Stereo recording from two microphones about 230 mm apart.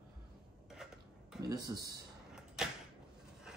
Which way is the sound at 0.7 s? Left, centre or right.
Centre.